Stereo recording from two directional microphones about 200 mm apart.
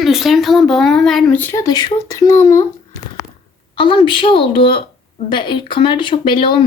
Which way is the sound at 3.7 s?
25° left (ahead or behind).